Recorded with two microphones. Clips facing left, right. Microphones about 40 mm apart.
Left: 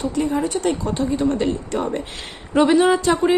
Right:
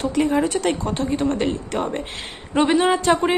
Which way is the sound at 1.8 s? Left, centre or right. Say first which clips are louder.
Left 1 dB; right.